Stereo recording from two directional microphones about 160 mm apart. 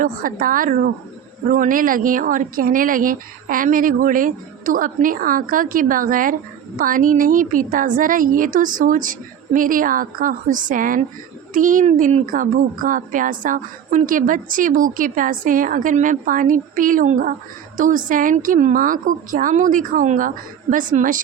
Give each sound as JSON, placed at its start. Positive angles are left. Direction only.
{"t": 0.0, "sound": "a woman's voice", "side_deg": -60}